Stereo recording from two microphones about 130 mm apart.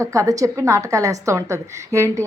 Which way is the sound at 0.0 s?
25° right (ahead or behind).